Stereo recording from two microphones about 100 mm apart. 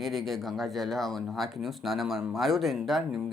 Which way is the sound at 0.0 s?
Centre (ahead or behind).